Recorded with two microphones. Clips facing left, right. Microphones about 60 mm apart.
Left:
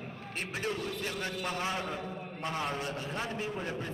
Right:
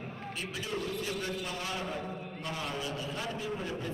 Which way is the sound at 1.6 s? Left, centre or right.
Left.